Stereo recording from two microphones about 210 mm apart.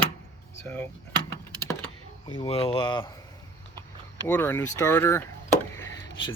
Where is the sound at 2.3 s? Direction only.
25° left (ahead or behind).